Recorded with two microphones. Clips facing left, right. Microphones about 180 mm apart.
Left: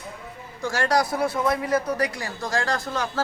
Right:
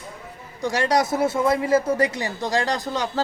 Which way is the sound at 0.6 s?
20° right (ahead or behind).